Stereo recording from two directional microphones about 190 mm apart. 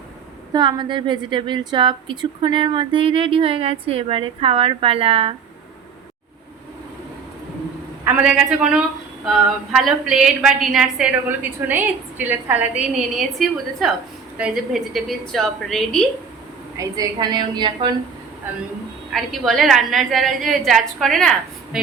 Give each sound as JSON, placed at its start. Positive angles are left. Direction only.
{"t": 0.5, "sound": "a woman's voice", "side_deg": -25}
{"t": 8.0, "sound": "a woman's voice", "side_deg": -5}
{"t": 16.7, "sound": "a woman's voice", "side_deg": -20}
{"t": 19.1, "sound": "a woman's voice", "side_deg": 0}